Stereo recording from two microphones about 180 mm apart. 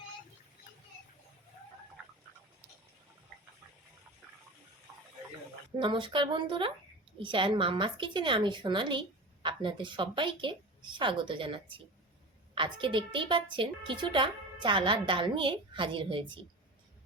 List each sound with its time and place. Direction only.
2.0 s chicken: 10° right (ahead or behind)
5.8 s a woman's voice: 25° right (ahead or behind)